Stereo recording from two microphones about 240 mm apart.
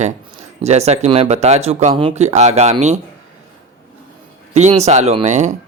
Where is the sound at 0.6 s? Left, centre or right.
Right.